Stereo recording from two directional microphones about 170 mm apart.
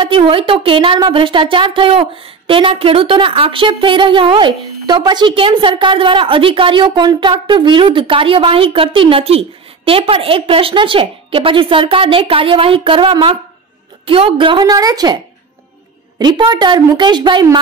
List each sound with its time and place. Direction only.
0.0 s a woman's voice: 30° right (ahead or behind)
16.2 s a woman's voice: 25° right (ahead or behind)